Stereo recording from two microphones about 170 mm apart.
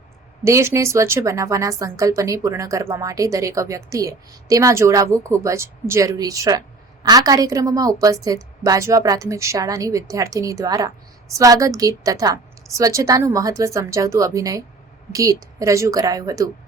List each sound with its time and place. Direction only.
0.4 s a woman's voice: 15° right (ahead or behind)